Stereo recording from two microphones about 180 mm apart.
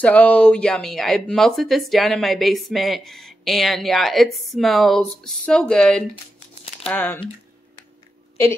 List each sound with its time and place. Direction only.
0.0 s speech: 5° left (ahead or behind)